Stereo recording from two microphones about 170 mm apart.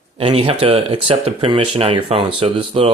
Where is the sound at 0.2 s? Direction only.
35° right (ahead or behind).